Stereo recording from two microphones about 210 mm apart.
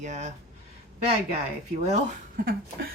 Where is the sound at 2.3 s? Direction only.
45° right (ahead or behind).